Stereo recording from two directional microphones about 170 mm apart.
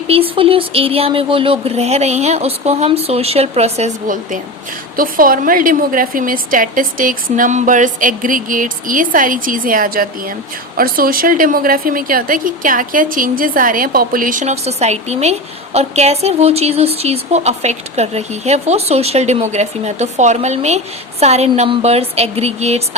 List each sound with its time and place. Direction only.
0.1 s a woman's voice: 35° right (ahead or behind)